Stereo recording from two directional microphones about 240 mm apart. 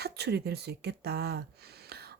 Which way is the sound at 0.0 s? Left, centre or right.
Right.